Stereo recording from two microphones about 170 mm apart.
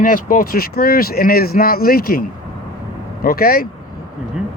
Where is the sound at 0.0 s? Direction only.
55° left (ahead or behind).